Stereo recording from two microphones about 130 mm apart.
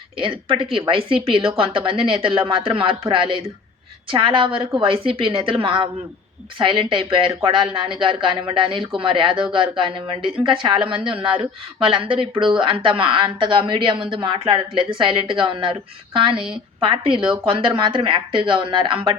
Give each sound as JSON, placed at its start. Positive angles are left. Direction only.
{"t": 0.2, "sound": "a woman's voice", "side_deg": -40}